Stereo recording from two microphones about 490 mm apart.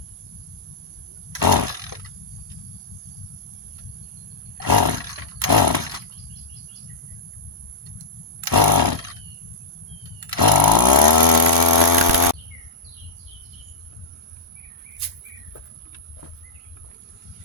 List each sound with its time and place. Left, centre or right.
1.3 s chainsaw: right
4.5 s roar: right
8.4 s chainsaw: right
10.2 s chainsaw: right